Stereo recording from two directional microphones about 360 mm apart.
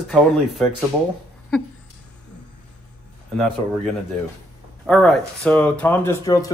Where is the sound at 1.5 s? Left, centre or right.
Centre.